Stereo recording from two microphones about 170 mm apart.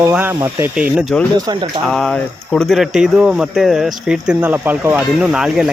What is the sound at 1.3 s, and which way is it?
Speech, 25° right (ahead or behind).